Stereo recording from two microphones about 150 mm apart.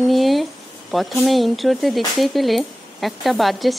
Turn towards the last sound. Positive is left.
turn(degrees=0)  # may be behind; listen again after turning